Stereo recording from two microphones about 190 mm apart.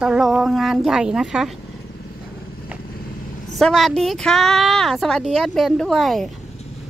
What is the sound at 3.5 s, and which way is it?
Speech, centre (ahead or behind).